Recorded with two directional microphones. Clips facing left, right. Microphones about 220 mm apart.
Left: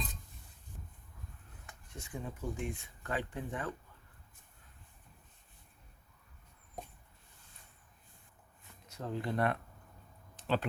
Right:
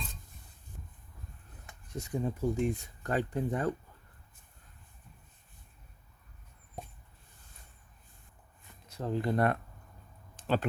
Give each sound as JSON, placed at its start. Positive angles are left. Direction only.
{"t": 1.9, "sound": "speech", "side_deg": -40}
{"t": 8.9, "sound": "speech", "side_deg": -35}
{"t": 10.3, "sound": "a sound", "side_deg": -45}